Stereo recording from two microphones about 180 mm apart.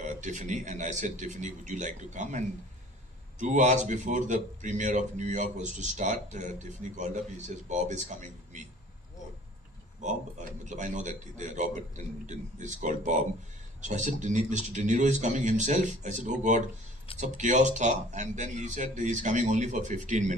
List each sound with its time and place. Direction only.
0.0 s a man's voice: 45° right (ahead or behind)
10.0 s a man's voice: 40° right (ahead or behind)